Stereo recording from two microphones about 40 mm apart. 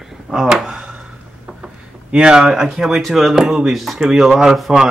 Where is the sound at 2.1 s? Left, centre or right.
Centre.